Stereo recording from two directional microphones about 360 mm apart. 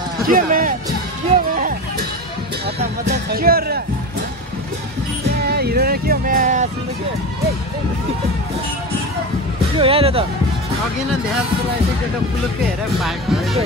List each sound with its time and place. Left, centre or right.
0.3 s speech: right
2.8 s speech: right
5.5 s speech: right
9.8 s speech: centre
13.0 s speech: centre